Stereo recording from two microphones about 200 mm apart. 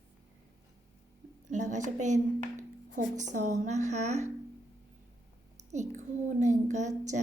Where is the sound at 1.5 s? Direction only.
35° right (ahead or behind).